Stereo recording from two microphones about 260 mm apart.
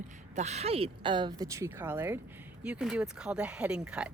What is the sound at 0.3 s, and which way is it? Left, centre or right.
Speech, right.